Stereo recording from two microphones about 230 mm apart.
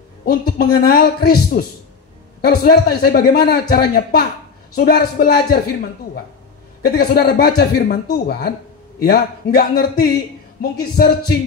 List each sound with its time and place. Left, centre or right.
0.2 s a man's voice: left
7.0 s a man's voice: left